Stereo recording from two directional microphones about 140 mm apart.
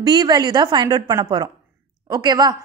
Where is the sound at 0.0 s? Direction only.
30° right (ahead or behind).